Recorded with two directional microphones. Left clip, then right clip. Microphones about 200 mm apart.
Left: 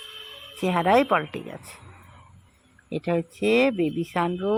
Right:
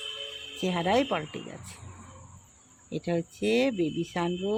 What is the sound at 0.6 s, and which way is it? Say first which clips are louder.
Speech: left 6 dB; 20° left (ahead or behind).